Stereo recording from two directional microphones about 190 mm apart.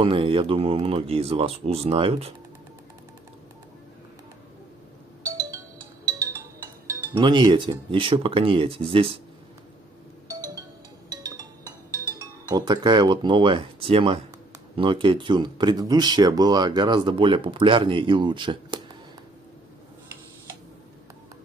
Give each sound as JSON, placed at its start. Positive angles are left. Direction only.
{"t": 0.0, "sound": "speech", "side_deg": -30}
{"t": 6.9, "sound": "speech", "side_deg": -25}
{"t": 11.1, "sound": "music", "side_deg": -20}
{"t": 12.4, "sound": "speech", "side_deg": -20}